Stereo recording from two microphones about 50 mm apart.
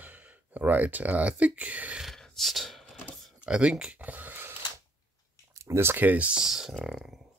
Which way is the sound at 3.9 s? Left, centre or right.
Right.